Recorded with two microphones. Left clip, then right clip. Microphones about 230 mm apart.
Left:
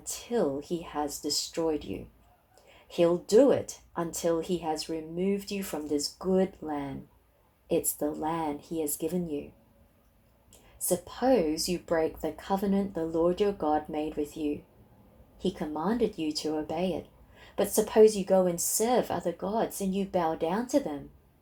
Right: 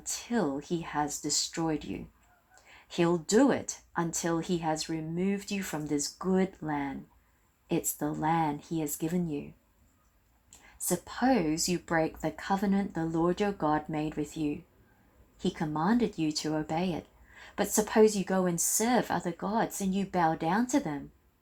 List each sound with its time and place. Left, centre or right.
0.3 s speech: right
10.8 s speech: right